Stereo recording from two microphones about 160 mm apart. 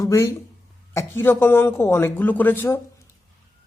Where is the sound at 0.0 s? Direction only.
20° left (ahead or behind).